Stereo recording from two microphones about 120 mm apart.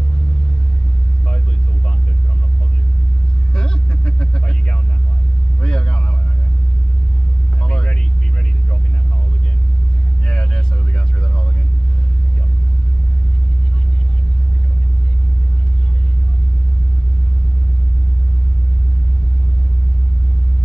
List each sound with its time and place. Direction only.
3.5 s vehicle: 5° left (ahead or behind)
7.6 s vehicle: 10° left (ahead or behind)
10.2 s vehicle: 10° left (ahead or behind)